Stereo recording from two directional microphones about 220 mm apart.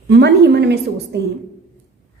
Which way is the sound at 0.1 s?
50° right (ahead or behind).